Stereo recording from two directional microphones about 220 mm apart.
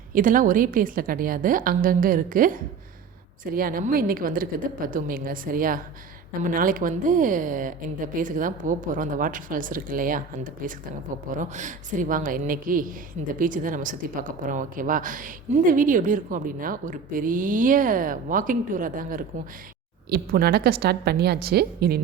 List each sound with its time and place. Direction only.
0.1 s a woman's voice: 40° right (ahead or behind)